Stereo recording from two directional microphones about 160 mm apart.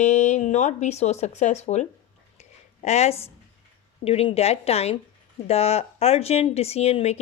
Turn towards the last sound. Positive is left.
turn(degrees=40)  # may be behind; listen again after turning